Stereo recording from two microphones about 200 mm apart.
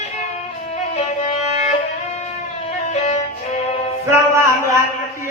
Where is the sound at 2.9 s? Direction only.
30° left (ahead or behind).